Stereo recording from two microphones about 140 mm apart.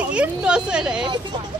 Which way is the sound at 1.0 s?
30° right (ahead or behind).